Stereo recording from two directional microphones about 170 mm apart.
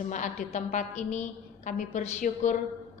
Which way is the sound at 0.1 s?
45° left (ahead or behind).